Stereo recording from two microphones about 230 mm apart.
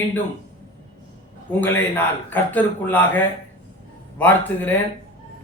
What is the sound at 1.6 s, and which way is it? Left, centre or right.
A man's voice, centre.